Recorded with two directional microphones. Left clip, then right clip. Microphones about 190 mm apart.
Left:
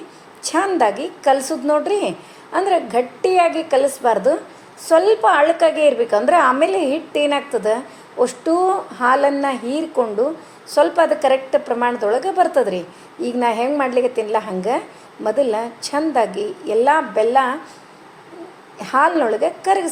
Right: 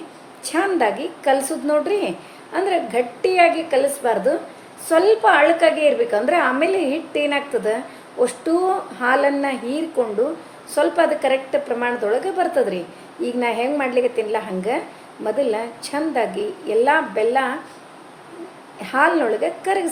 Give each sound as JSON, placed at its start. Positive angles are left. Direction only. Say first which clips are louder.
{"t": 0.4, "sound": "a woman's voice", "louder": "left 2 dB", "side_deg": 20}
{"t": 18.8, "sound": "a woman's voice", "louder": "left 2 dB", "side_deg": 20}